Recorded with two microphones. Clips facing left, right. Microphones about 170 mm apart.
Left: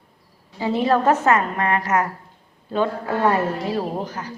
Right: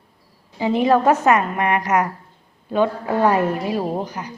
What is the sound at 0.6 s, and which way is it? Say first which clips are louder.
A woman's voice: right 2 dB; 15° right (ahead or behind).